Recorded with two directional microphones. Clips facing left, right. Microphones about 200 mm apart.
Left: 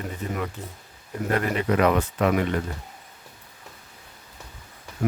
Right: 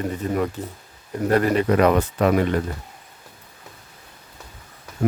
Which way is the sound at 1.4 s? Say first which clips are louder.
Right 5 dB; 40° right (ahead or behind).